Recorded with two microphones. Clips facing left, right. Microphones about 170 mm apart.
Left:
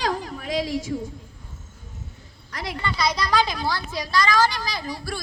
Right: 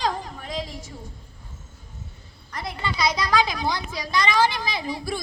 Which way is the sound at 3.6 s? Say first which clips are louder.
Even; 20° right (ahead or behind).